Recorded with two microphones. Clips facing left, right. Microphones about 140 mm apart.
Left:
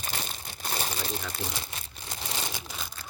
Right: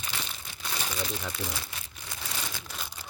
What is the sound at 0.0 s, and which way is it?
Crumpling, 45° left (ahead or behind).